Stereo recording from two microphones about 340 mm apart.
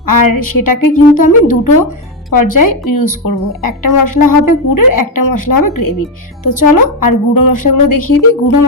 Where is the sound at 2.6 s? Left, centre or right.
Left.